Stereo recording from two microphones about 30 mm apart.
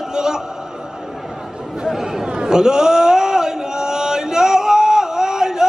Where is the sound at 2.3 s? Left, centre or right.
Right.